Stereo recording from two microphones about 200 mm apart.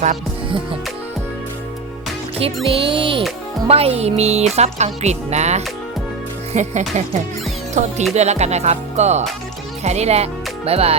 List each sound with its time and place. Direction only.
0.0 s music: 30° right (ahead or behind)
2.6 s speech: 25° right (ahead or behind)